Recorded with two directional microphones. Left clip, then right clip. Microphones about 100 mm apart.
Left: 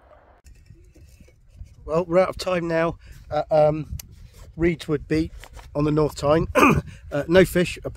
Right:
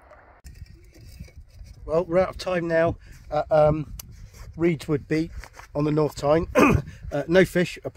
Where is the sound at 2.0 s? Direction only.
25° left (ahead or behind).